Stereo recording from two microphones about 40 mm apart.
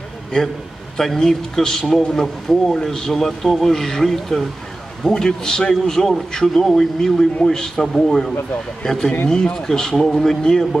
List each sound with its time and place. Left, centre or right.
0.9 s speech: centre